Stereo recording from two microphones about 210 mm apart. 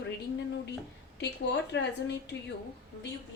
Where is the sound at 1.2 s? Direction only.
55° left (ahead or behind).